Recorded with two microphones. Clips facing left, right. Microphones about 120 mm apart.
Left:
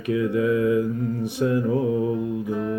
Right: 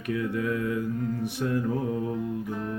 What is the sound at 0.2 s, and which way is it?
Mantra, 90° left.